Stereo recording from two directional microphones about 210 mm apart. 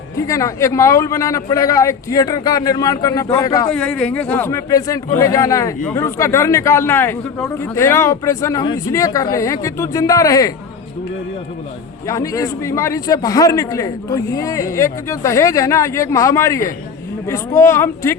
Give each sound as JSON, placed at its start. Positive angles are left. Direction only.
{"t": 0.2, "sound": "a man's voice", "side_deg": 15}
{"t": 3.7, "sound": "a man's voice", "side_deg": 5}
{"t": 12.0, "sound": "a man's voice", "side_deg": 15}